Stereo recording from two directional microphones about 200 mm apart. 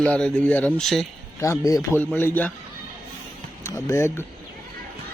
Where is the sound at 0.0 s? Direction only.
5° left (ahead or behind).